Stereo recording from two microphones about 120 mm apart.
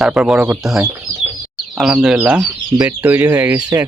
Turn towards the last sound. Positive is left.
turn(degrees=-15)  # may be behind; listen again after turning